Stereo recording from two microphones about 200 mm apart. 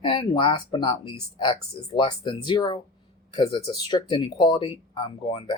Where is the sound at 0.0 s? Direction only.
25° left (ahead or behind).